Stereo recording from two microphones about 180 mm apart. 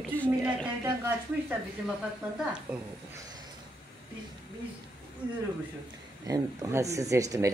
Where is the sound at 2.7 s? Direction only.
5° right (ahead or behind).